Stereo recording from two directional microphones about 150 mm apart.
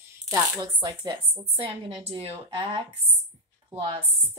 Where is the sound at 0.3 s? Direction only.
25° right (ahead or behind).